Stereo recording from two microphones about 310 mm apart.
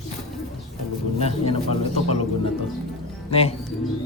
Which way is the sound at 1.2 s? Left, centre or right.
Centre.